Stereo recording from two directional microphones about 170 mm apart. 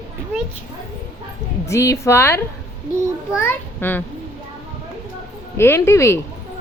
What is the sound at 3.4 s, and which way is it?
Speech, 10° left (ahead or behind).